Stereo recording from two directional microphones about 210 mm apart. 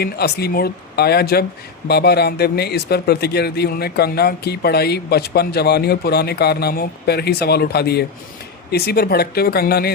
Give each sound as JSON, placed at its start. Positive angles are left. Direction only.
{"t": 0.0, "sound": "speech", "side_deg": 50}